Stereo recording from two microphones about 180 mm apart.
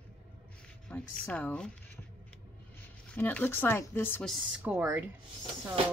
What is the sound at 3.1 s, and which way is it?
Speech, 10° left (ahead or behind).